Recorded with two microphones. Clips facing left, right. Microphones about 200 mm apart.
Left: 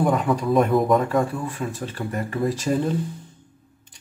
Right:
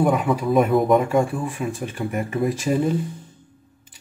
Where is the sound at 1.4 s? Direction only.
15° right (ahead or behind).